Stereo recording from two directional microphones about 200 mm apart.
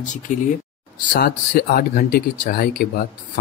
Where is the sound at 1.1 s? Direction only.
45° left (ahead or behind).